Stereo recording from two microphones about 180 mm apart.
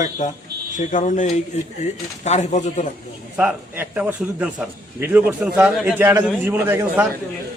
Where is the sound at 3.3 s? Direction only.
10° right (ahead or behind).